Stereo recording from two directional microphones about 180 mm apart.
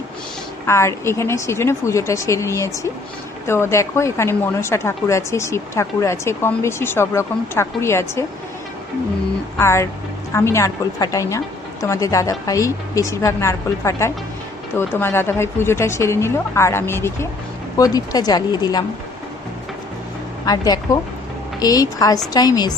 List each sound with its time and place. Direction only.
0.7 s a woman's voice: 15° left (ahead or behind)
9.6 s a woman's voice: 15° left (ahead or behind)
20.4 s speech: 20° left (ahead or behind)